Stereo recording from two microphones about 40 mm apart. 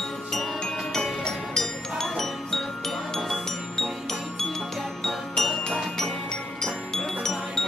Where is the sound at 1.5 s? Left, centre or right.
Centre.